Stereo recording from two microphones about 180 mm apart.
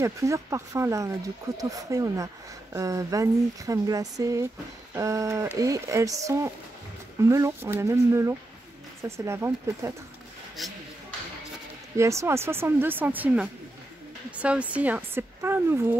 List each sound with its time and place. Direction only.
0.0 s speech: 15° right (ahead or behind)
10.6 s speech: centre (ahead or behind)
12.0 s speech: 15° right (ahead or behind)